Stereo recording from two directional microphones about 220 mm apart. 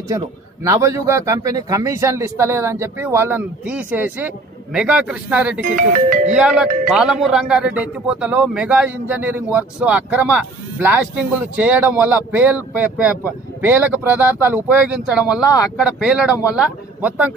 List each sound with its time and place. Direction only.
0.7 s a man's voice: 15° right (ahead or behind)